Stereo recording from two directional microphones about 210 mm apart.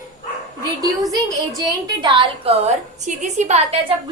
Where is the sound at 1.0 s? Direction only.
15° right (ahead or behind).